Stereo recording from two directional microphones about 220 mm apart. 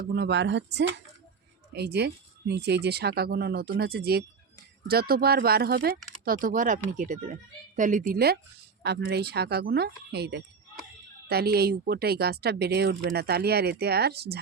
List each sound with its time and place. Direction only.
0.0 s speech: 50° right (ahead or behind)